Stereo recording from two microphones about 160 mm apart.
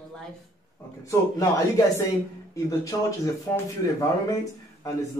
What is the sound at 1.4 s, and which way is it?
Speech, 20° left (ahead or behind).